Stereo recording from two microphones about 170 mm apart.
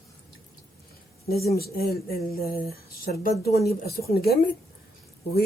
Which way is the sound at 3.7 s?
65° left (ahead or behind).